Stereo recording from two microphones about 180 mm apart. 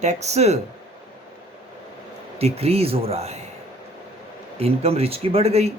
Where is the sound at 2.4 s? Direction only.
35° right (ahead or behind).